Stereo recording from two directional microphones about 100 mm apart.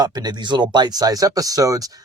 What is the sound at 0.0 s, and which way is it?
Speech, 40° right (ahead or behind).